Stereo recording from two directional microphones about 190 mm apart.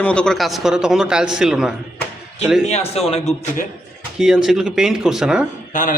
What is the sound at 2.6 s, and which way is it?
A man's voice, 35° left (ahead or behind).